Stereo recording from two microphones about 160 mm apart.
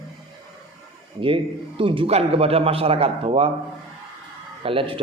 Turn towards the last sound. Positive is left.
turn(degrees=-35)  # may be behind; listen again after turning